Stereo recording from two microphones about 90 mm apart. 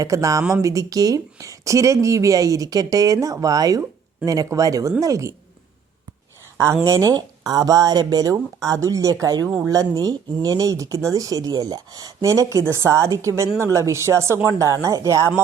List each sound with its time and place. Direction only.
0.0 s speech: 35° right (ahead or behind)
6.8 s speech: 40° right (ahead or behind)